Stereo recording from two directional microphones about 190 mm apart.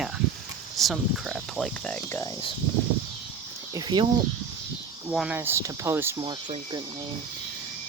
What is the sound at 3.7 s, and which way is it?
Speech, 20° right (ahead or behind).